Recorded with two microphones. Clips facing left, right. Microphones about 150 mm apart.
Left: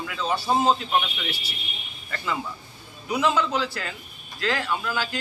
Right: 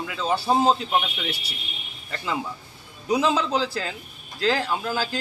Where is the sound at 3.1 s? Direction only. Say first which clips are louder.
Right 2 dB; 30° right (ahead or behind).